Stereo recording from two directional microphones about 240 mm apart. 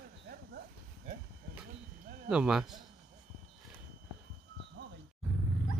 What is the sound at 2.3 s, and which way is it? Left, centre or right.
Speech, centre.